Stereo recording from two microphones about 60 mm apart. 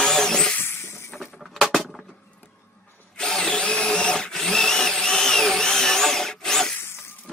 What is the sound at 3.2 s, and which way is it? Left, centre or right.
Drill, centre.